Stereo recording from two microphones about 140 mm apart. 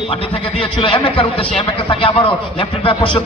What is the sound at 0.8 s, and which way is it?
A man's voice, 40° left (ahead or behind).